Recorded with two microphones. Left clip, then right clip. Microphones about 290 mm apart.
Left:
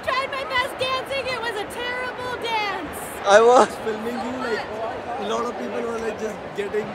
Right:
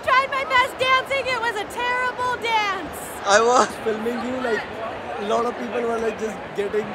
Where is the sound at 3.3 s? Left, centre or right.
Centre.